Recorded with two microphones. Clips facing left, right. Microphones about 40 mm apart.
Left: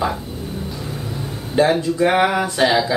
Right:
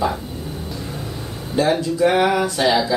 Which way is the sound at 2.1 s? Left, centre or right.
Centre.